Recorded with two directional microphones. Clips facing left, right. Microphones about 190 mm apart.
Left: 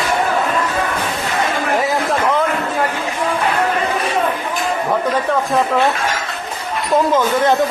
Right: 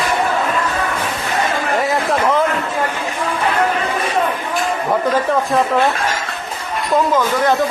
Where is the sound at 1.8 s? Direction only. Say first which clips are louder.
Right 3 dB; centre (ahead or behind).